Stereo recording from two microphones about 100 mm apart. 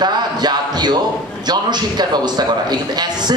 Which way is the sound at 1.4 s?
45° right (ahead or behind).